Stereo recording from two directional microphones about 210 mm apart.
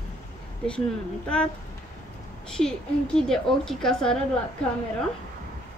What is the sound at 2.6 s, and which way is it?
A woman's voice, 5° left (ahead or behind).